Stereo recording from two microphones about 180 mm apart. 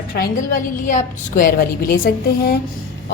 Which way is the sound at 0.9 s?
45° left (ahead or behind).